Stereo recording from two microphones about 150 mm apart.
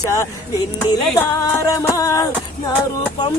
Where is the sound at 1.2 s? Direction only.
20° left (ahead or behind).